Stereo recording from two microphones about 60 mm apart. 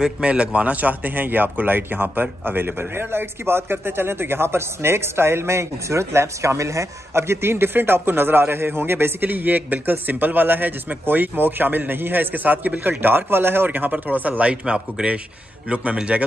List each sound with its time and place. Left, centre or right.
0.0 s a man's voice: centre